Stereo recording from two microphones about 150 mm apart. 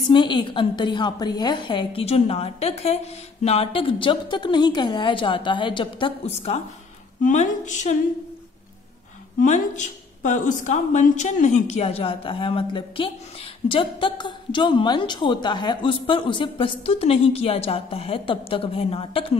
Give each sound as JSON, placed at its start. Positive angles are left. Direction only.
{"t": 0.1, "sound": "a woman's voice", "side_deg": 30}
{"t": 7.2, "sound": "a woman's voice", "side_deg": 55}
{"t": 9.4, "sound": "a woman's voice", "side_deg": 55}